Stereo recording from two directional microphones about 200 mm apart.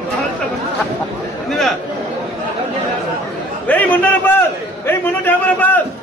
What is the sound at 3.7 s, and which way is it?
A man's voice, 10° left (ahead or behind).